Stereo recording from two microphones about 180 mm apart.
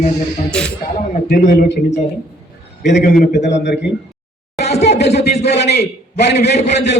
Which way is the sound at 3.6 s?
75° left (ahead or behind).